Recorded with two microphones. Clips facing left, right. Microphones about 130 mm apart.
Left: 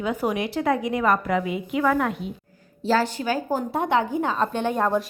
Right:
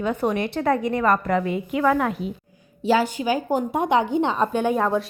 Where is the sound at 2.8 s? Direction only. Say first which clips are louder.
Right 2 dB; 10° right (ahead or behind).